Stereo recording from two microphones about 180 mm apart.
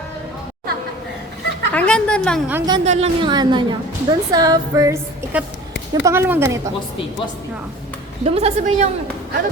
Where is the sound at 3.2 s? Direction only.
25° right (ahead or behind).